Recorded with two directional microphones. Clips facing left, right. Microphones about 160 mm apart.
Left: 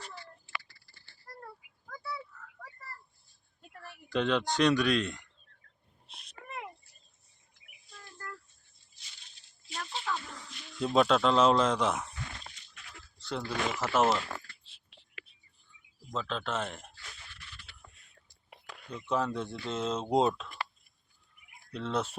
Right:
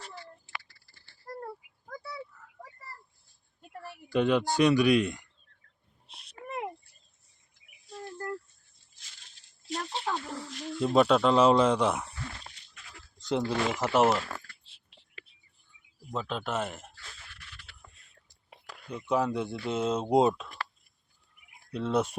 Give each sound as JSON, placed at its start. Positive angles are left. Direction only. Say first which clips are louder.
{"t": 1.4, "sound": "a sound", "louder": "right 7 dB", "side_deg": -35}
{"t": 2.3, "sound": "a sound", "louder": "left 3 dB", "side_deg": -15}
{"t": 3.8, "sound": "speech", "louder": "right 4 dB", "side_deg": -10}
{"t": 7.9, "sound": "cricket", "louder": "right 10 dB", "side_deg": -40}
{"t": 9.6, "sound": "a sound", "louder": "right 4 dB", "side_deg": -40}
{"t": 10.8, "sound": "speech", "louder": "right 3 dB", "side_deg": -5}
{"t": 13.2, "sound": "speech", "louder": "right 5 dB", "side_deg": -20}
{"t": 16.0, "sound": "speech", "louder": "right 2 dB", "side_deg": -10}
{"t": 18.9, "sound": "speech", "louder": "right 3 dB", "side_deg": -10}
{"t": 21.7, "sound": "speech", "louder": "right 5 dB", "side_deg": -10}